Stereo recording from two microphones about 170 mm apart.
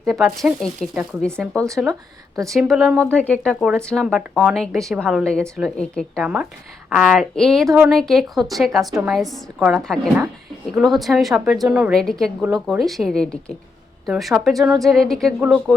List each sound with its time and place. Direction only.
0.0 s a woman's voice: centre (ahead or behind)
1.9 s speech: 20° right (ahead or behind)
2.5 s a woman's voice: centre (ahead or behind)